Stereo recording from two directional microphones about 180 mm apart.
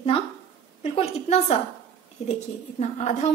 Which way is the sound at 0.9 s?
35° left (ahead or behind).